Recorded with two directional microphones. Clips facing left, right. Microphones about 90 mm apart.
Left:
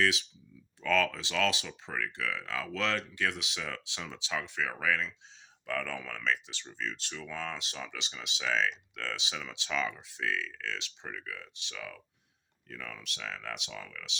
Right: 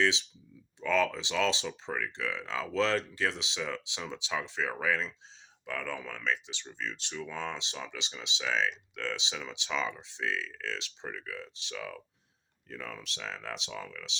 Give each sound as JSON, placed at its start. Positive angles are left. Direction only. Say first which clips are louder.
{"t": 0.0, "sound": "speech", "louder": "right 1 dB", "side_deg": -25}
{"t": 5.6, "sound": "speech", "louder": "left 1 dB", "side_deg": -15}